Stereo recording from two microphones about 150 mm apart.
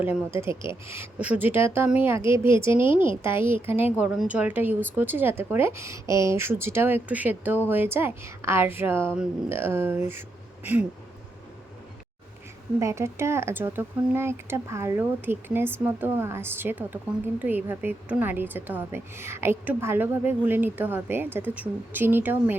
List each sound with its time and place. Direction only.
0.0 s a woman's voice: 10° right (ahead or behind)
2.8 s a woman's voice: 35° left (ahead or behind)
3.1 s a woman's voice: 15° right (ahead or behind)
12.8 s a woman's voice: 20° right (ahead or behind)